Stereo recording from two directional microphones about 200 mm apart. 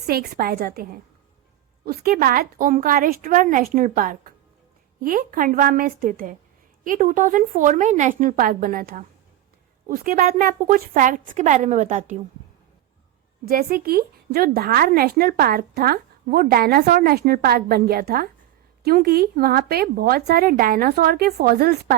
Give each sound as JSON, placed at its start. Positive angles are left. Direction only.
{"t": 0.1, "sound": "a woman's voice", "side_deg": -50}
{"t": 13.4, "sound": "a woman's voice", "side_deg": -45}